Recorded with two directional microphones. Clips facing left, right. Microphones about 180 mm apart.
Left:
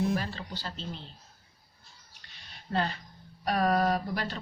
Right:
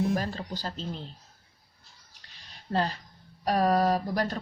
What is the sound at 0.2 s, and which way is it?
Speech, 40° right (ahead or behind).